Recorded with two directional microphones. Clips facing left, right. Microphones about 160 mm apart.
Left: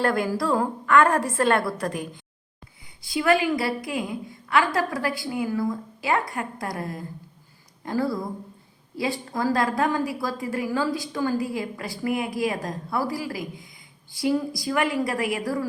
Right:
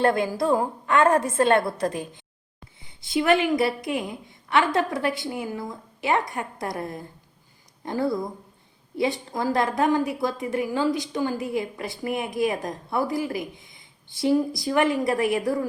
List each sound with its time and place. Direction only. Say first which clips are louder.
0.0 s a woman's voice: right 2 dB; 25° right (ahead or behind)